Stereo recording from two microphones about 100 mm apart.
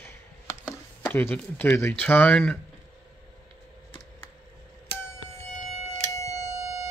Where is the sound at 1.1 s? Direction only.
15° left (ahead or behind).